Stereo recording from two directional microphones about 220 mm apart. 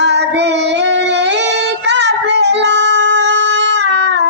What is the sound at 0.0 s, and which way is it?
Child singing, 50° right (ahead or behind).